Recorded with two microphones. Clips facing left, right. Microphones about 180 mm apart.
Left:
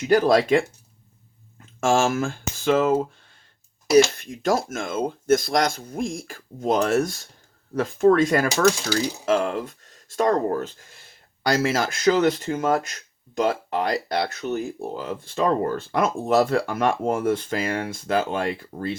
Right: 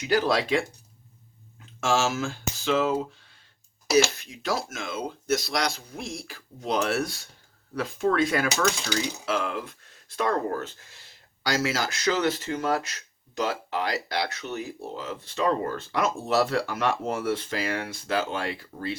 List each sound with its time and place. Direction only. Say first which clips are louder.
0.0 s speech: left 6 dB; 45° left (ahead or behind)
1.8 s speech: left 5 dB; 50° left (ahead or behind)
4.2 s speech: left 7 dB; 50° left (ahead or behind)
11.4 s speech: left 5 dB; 50° left (ahead or behind)